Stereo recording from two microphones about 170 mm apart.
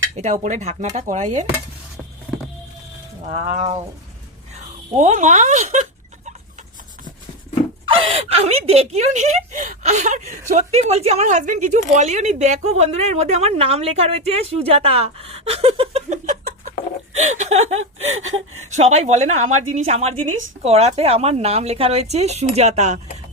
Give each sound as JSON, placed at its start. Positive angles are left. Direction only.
{"t": 0.2, "sound": "speech", "side_deg": -45}
{"t": 3.2, "sound": "speech", "side_deg": -40}
{"t": 4.9, "sound": "speech", "side_deg": -45}
{"t": 7.9, "sound": "speech", "side_deg": -35}